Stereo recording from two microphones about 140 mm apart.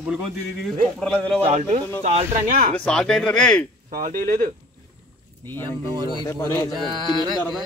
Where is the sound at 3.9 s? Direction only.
80° right.